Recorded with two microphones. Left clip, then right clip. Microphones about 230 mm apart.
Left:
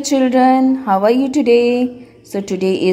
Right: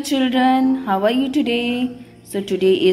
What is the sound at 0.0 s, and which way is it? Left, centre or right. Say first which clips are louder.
A woman's voice: left 5 dB; centre.